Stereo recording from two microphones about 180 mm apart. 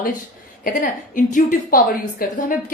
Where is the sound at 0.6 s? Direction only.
50° left (ahead or behind).